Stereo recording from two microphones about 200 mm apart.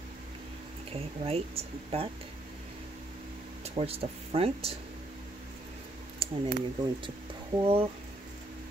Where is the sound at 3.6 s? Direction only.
30° right (ahead or behind).